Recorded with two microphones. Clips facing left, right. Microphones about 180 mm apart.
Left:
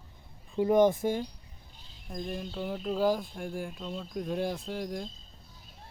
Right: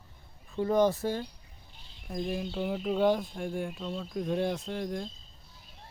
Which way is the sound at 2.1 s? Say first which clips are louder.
Right 3 dB; 5° right (ahead or behind).